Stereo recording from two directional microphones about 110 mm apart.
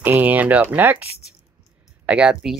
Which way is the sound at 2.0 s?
10° right (ahead or behind).